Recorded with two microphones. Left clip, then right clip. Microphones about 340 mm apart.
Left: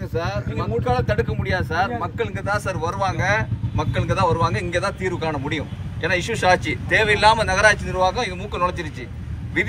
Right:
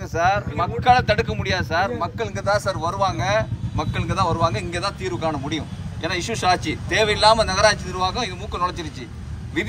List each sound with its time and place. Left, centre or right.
0.2 s speech: right
0.8 s speech: centre